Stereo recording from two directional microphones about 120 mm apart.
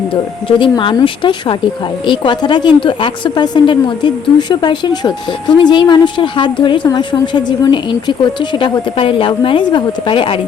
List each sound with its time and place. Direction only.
0.1 s speech: 50° left (ahead or behind)